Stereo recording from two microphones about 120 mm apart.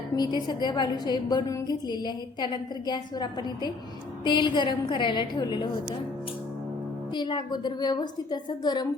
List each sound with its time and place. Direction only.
0.2 s a woman's voice: 40° left (ahead or behind)
7.1 s a woman's voice: 40° left (ahead or behind)